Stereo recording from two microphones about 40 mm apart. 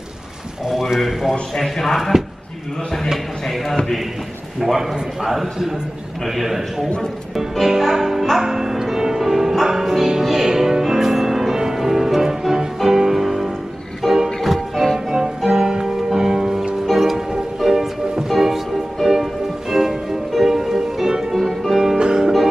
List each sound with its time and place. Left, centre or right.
0.7 s a man's voice: centre
1.5 s speech: centre
3.4 s a man's voice: centre
7.6 s music: centre
14.0 s music: centre
15.0 s music: centre
21.4 s music: centre
21.7 s music: centre